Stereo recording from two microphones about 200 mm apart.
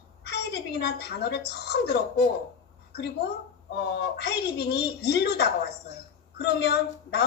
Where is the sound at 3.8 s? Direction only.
55° left (ahead or behind).